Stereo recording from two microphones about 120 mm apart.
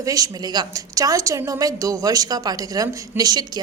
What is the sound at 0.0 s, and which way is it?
A woman's voice, 30° right (ahead or behind).